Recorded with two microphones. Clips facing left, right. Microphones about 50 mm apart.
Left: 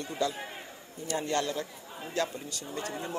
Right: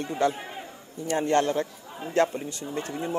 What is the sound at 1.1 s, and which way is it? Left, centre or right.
A man's voice, right.